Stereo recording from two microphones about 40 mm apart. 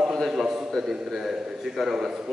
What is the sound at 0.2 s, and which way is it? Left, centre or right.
A man's voice, centre.